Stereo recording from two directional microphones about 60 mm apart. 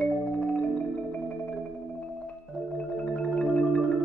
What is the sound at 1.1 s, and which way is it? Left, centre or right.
Marimba, centre.